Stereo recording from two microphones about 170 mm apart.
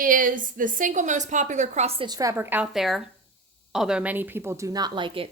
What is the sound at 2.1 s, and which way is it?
A woman's voice, 20° right (ahead or behind).